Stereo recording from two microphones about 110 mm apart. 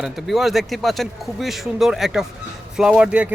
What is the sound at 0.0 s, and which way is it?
Speech, centre (ahead or behind).